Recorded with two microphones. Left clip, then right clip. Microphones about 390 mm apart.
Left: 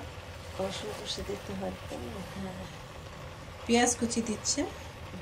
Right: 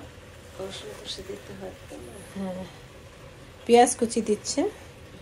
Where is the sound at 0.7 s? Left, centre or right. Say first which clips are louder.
Left 1 dB; left.